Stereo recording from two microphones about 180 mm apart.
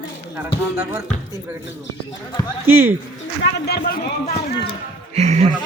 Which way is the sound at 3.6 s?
65° left (ahead or behind).